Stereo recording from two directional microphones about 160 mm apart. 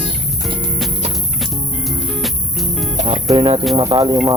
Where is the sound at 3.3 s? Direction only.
35° right (ahead or behind).